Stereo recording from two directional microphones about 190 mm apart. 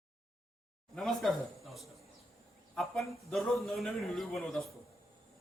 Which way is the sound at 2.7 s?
Centre (ahead or behind).